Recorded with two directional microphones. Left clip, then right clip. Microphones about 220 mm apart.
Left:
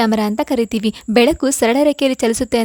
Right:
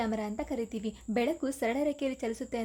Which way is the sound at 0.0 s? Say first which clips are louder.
Left 17 dB; 45° left (ahead or behind).